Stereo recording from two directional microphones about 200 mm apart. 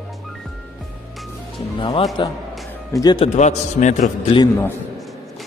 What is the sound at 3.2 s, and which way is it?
Speech, 35° left (ahead or behind).